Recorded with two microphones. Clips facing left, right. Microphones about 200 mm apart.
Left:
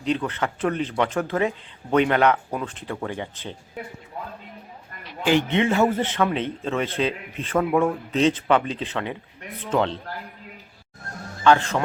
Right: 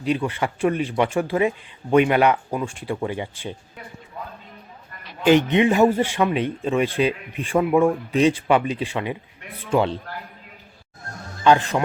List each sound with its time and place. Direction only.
0.0 s speech: 10° right (ahead or behind)
5.2 s speech: 20° right (ahead or behind)
11.4 s speech: 15° right (ahead or behind)